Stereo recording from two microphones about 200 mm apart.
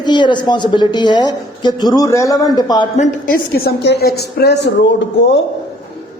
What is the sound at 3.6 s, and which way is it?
A man's voice, 55° left (ahead or behind).